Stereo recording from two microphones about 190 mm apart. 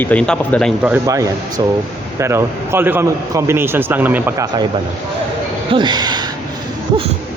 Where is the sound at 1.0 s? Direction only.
15° right (ahead or behind).